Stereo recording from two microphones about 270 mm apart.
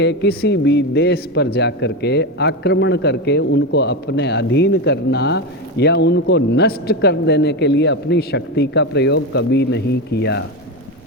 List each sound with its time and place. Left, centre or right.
0.0 s a man's voice: left